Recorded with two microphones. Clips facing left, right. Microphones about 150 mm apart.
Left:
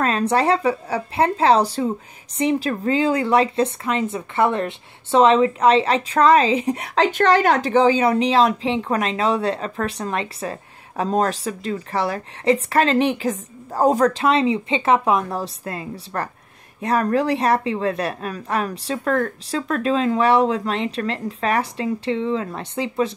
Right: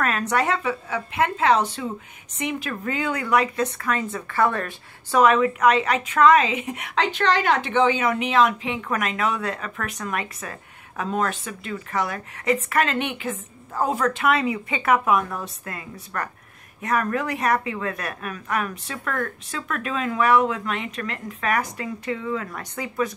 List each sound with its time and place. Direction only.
0.0 s a woman's voice: 30° left (ahead or behind)
7.1 s speech: 45° left (ahead or behind); by 23.1 s 25° left (ahead or behind)